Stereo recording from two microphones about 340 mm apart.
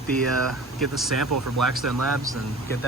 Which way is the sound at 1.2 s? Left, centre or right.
Right.